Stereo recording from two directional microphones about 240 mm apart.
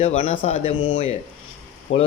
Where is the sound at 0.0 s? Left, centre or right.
Left.